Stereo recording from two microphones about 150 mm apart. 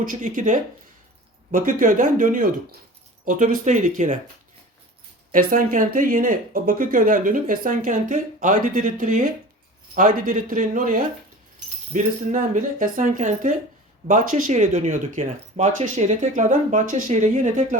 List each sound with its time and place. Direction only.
0.0 s speech: 60° right (ahead or behind)
5.3 s speech: 65° right (ahead or behind)